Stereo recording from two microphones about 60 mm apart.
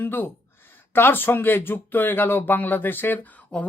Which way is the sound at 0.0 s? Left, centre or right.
Left.